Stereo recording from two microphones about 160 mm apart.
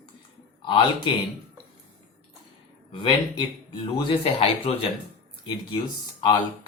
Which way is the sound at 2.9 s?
30° left (ahead or behind).